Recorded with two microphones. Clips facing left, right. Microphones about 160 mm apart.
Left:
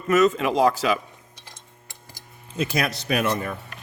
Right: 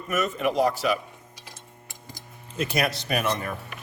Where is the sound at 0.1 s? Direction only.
90° left.